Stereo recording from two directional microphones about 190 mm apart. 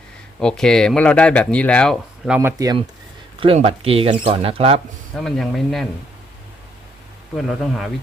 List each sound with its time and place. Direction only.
0.3 s speech: 5° left (ahead or behind)
2.4 s speech: 15° right (ahead or behind)
3.4 s speech: 30° right (ahead or behind)
5.1 s speech: centre (ahead or behind)
7.3 s speech: centre (ahead or behind)